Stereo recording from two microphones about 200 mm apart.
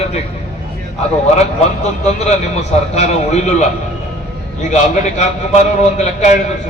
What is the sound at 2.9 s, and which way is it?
Speech, 35° left (ahead or behind).